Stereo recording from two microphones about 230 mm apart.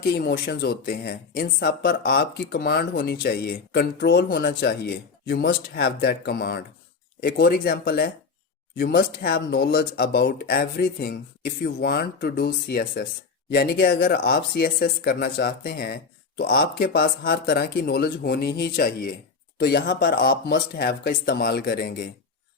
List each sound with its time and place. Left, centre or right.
0.0 s speech: left